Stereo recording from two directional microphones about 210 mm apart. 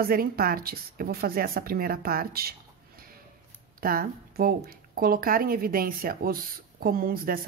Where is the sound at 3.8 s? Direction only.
45° right (ahead or behind).